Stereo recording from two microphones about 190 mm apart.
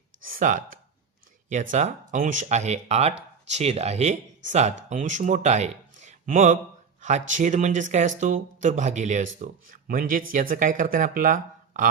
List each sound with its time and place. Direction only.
0.3 s speech: 45° right (ahead or behind)